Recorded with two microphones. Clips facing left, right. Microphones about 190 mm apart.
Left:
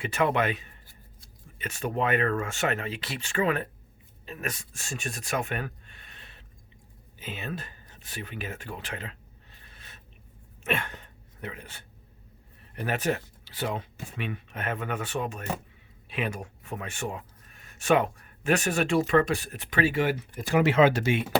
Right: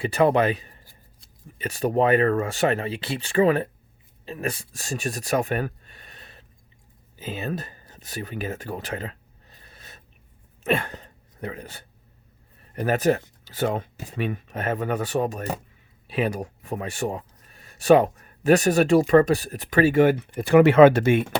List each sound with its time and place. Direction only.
0.0 s speech: 35° right (ahead or behind)
7.2 s a sound: 40° right (ahead or behind)
10.6 s speech: 35° right (ahead or behind); by 21.2 s 55° right (ahead or behind)